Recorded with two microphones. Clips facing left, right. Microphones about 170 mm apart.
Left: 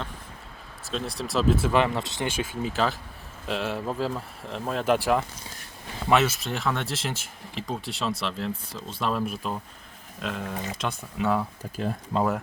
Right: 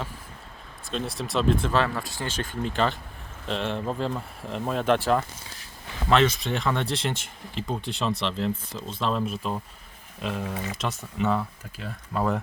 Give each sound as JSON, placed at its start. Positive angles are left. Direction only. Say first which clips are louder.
{"t": 0.9, "sound": "speech", "louder": "even", "side_deg": 0}
{"t": 1.8, "sound": "speech", "louder": "left 2 dB", "side_deg": 20}
{"t": 4.9, "sound": "speech", "louder": "even", "side_deg": 10}
{"t": 12.1, "sound": "speech", "louder": "left 2 dB", "side_deg": 25}